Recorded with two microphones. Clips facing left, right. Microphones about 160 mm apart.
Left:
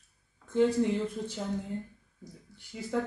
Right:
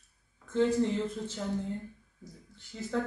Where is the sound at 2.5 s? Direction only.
15° left (ahead or behind).